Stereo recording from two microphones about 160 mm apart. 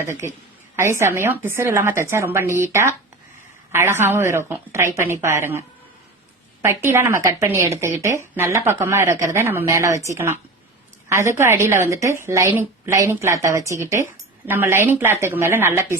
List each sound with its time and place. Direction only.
0.0 s a woman's voice: 15° right (ahead or behind)